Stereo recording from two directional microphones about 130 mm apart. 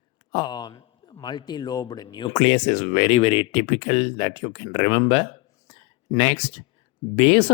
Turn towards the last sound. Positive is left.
turn(degrees=50)  # may be behind; listen again after turning